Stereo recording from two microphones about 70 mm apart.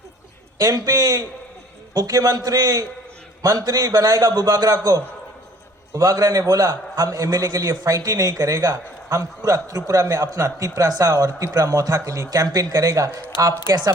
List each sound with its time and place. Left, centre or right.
0.6 s a man's voice: right
5.9 s a man's voice: right